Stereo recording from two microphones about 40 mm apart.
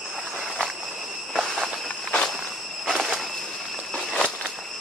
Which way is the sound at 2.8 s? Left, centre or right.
Centre.